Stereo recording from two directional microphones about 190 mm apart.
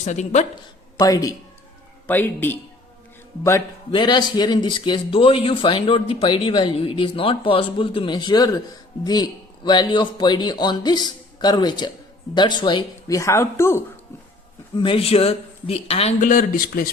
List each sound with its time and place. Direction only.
0.0 s speech: 40° left (ahead or behind)
0.9 s a man's voice: 20° left (ahead or behind)
14.8 s speech: 30° left (ahead or behind)
16.2 s a man's voice: 45° left (ahead or behind)